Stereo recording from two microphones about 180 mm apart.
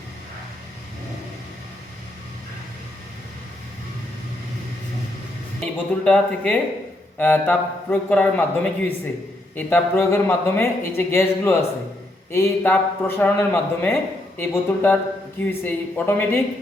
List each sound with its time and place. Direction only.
5.5 s a man's voice: 5° left (ahead or behind)